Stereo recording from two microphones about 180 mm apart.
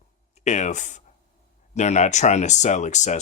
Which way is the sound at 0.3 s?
40° left (ahead or behind).